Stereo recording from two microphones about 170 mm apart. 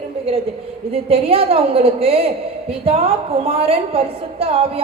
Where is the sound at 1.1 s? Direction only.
35° right (ahead or behind).